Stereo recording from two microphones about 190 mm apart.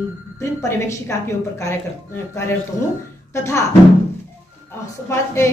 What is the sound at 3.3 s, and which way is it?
Speech, 15° left (ahead or behind).